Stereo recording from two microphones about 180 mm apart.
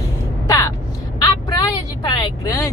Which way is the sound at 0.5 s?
15° left (ahead or behind).